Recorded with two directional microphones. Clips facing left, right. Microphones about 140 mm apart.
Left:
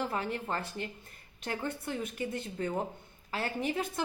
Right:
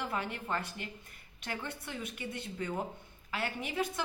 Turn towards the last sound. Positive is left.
turn(degrees=35)  # may be behind; listen again after turning